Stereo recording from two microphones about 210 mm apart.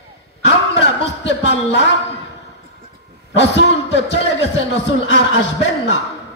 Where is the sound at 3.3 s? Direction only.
55° left (ahead or behind).